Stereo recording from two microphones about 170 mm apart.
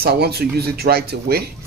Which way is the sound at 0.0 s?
70° right (ahead or behind).